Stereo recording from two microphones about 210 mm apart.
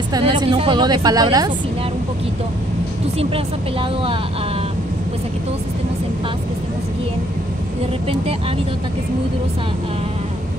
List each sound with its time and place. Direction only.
0.1 s speech: 20° right (ahead or behind)